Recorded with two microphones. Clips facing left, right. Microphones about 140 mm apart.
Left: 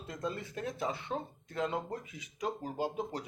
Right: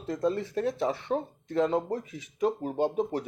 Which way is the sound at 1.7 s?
35° right (ahead or behind).